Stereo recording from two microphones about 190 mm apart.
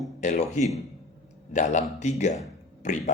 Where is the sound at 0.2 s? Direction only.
40° left (ahead or behind).